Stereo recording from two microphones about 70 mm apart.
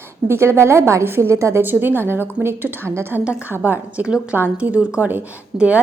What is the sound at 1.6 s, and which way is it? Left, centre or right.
A woman's voice, right.